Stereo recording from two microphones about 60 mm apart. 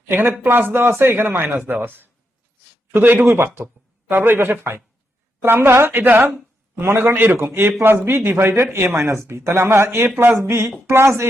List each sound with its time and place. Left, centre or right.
0.1 s speech: right